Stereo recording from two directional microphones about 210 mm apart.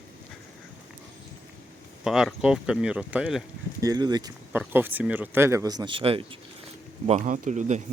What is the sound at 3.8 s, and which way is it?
Speech, 20° right (ahead or behind).